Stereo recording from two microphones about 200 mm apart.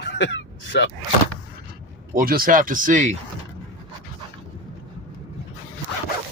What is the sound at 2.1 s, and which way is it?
Speech, 45° right (ahead or behind).